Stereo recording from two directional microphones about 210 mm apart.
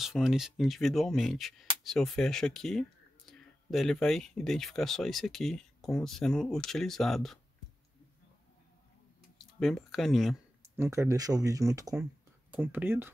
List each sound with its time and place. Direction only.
0.0 s speech: centre (ahead or behind)
9.6 s speech: centre (ahead or behind)
10.8 s speech: 15° right (ahead or behind)